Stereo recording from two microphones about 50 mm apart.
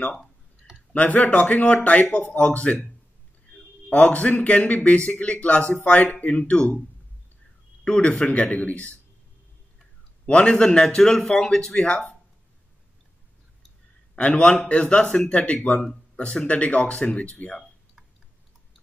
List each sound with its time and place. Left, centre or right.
0.9 s speech: left
3.9 s speech: left
7.8 s speech: left
10.2 s a man's voice: left
14.1 s speech: left